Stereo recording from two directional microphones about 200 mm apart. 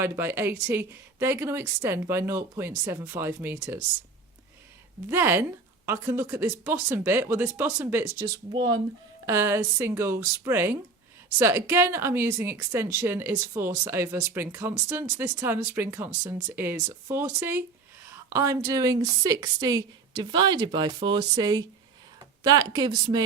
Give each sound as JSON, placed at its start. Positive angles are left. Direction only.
{"t": 0.0, "sound": "a woman's voice", "side_deg": -10}
{"t": 5.0, "sound": "a woman's voice", "side_deg": -10}
{"t": 8.2, "sound": "a woman's voice", "side_deg": -20}